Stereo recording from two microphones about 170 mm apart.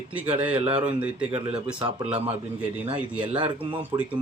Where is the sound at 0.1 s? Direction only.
10° right (ahead or behind).